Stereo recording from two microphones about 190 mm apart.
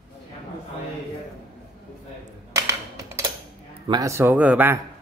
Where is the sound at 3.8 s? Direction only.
20° right (ahead or behind).